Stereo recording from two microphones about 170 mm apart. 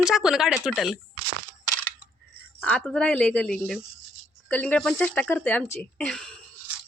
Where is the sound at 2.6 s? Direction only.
5° left (ahead or behind).